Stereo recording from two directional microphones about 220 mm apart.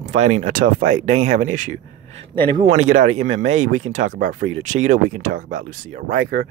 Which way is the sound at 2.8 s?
35° right (ahead or behind).